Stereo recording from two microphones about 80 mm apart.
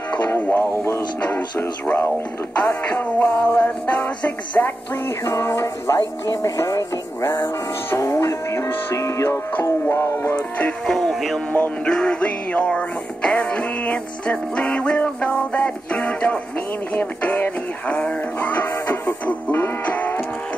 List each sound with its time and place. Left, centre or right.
0.3 s music: left
2.6 s music: left
5.2 s music: left
10.3 s music: centre
11.5 s music: left